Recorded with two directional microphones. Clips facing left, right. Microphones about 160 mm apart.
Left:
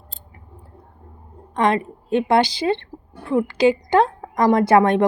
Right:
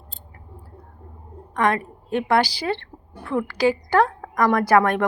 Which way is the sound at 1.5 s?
20° left (ahead or behind).